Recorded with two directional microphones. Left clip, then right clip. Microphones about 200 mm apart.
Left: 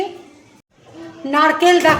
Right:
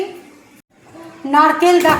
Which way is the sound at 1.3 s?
15° left (ahead or behind).